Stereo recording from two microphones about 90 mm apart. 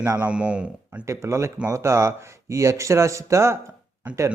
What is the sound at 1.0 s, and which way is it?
A man's voice, 30° right (ahead or behind).